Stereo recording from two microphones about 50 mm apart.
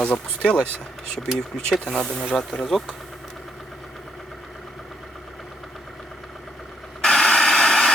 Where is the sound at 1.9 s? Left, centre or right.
Centre.